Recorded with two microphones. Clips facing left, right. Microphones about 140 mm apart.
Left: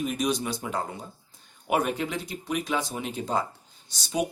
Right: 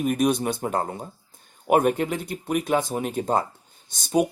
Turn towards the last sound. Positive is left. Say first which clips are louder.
# right 6 dB
turn(degrees=-50)  # may be behind; listen again after turning